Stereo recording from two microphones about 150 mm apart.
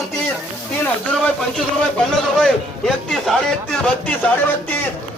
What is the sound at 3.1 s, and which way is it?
A man's voice, centre (ahead or behind).